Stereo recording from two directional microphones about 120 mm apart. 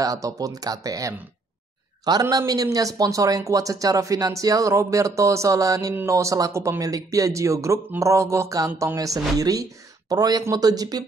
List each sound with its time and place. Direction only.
0.0 s speech: 30° right (ahead or behind)
2.3 s speech: 30° right (ahead or behind)